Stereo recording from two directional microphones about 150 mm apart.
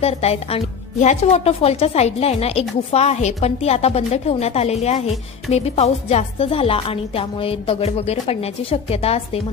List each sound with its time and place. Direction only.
0.0 s speech: 45° left (ahead or behind)